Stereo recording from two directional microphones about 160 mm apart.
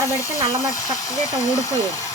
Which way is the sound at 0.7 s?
20° left (ahead or behind).